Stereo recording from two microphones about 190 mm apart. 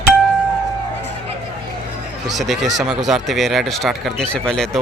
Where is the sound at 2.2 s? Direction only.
Centre (ahead or behind).